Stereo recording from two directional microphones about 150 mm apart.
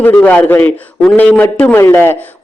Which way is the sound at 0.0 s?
10° left (ahead or behind).